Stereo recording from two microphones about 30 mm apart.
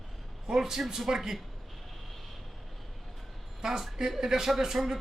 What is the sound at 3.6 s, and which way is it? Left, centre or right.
Speech, centre.